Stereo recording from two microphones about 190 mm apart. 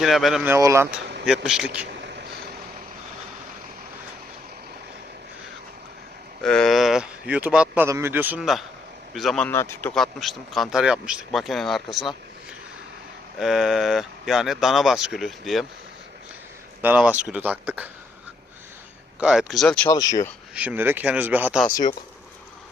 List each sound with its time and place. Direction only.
0.0 s speech: centre (ahead or behind)
0.5 s speech: 15° right (ahead or behind)
1.2 s speech: centre (ahead or behind)
6.4 s speech: 5° left (ahead or behind)
16.8 s speech: 5° right (ahead or behind)
19.2 s speech: 5° right (ahead or behind)
19.9 s speech: 20° left (ahead or behind)
20.6 s speech: 10° right (ahead or behind)